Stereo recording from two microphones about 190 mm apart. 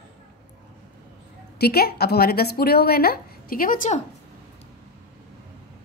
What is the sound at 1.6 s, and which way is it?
Speech, 55° left (ahead or behind).